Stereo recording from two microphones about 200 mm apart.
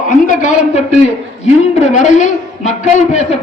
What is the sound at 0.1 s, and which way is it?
A man's voice, 40° left (ahead or behind).